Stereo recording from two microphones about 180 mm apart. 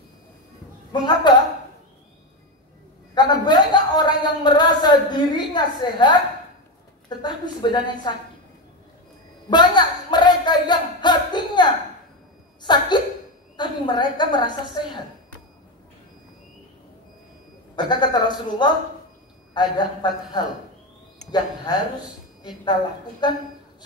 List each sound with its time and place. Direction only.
0.9 s speech: 25° left (ahead or behind)
3.2 s a sound: 25° left (ahead or behind)
7.2 s speech: 25° left (ahead or behind)
9.5 s a sound: 25° left (ahead or behind)
12.6 s a woman's voice: 25° left (ahead or behind)
17.7 s speech: 25° left (ahead or behind)
21.7 s speech: 25° left (ahead or behind)
23.2 s speech: 25° left (ahead or behind)